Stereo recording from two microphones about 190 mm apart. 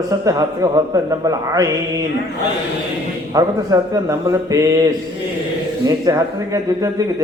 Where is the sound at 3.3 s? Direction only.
20° right (ahead or behind).